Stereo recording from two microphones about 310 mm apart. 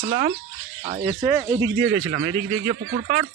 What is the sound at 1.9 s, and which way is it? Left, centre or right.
Speech, right.